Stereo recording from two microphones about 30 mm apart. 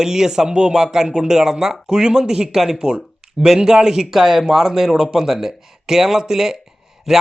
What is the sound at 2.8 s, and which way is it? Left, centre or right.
Speech, right.